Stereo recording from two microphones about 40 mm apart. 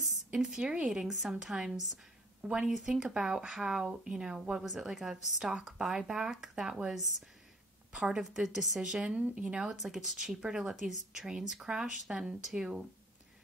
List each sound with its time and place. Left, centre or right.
0.3 s speech: right
5.1 s speech: centre
7.9 s a woman's voice: right
8.3 s speech: centre
9.3 s speech: right